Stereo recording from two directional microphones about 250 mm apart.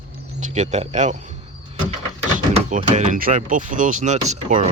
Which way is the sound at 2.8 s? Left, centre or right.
Right.